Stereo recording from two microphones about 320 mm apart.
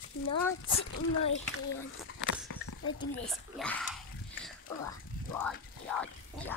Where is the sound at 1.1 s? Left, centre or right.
Left.